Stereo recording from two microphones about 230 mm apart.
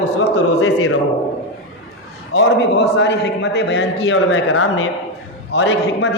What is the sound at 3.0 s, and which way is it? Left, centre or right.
A man's voice, left.